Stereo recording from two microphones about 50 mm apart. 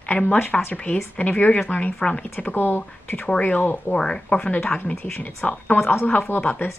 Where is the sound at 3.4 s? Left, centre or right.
Left.